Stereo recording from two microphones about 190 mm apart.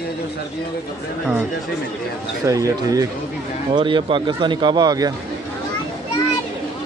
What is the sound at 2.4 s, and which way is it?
Speech, 15° right (ahead or behind).